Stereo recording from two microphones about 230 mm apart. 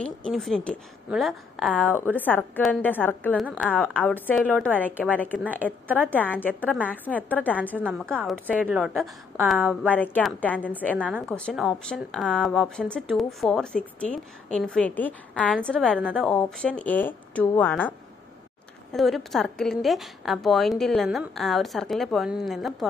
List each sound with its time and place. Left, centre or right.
0.0 s speech: centre
5.4 s a woman's voice: centre
6.1 s speech: centre
9.8 s speech: centre